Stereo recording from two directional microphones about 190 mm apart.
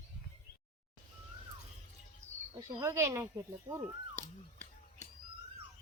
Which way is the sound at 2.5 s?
20° right (ahead or behind).